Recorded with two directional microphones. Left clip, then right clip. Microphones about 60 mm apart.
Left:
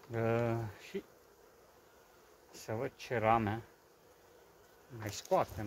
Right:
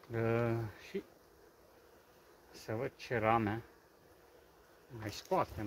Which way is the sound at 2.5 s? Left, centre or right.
Left.